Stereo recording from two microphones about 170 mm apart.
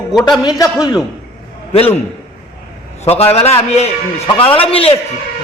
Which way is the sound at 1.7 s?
35° left (ahead or behind).